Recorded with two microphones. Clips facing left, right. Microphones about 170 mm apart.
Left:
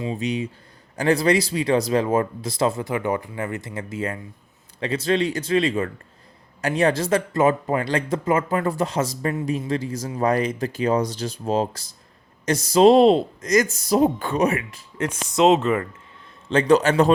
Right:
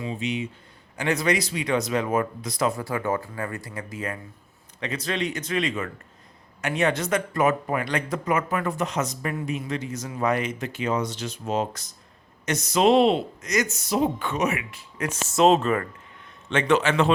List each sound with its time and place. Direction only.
0.0 s speech: 35° left (ahead or behind)
15.4 s speech: 20° left (ahead or behind)
16.5 s speech: 35° left (ahead or behind)